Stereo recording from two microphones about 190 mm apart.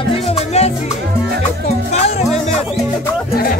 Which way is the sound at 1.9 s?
35° left (ahead or behind).